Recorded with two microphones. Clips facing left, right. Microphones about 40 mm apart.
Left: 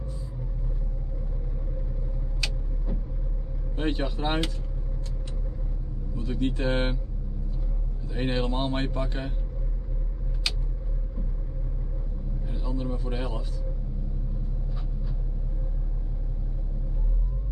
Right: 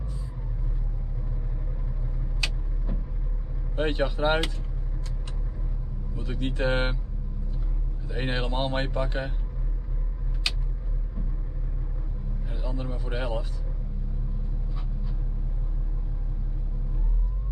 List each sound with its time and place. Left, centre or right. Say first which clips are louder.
3.7 s speech: right 3 dB; right
6.1 s speech: left 2 dB; centre
8.1 s a man's voice: left 2 dB; right
12.4 s a sound: left 3 dB; right